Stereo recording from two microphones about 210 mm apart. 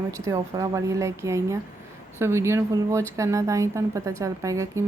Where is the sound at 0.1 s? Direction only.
15° right (ahead or behind).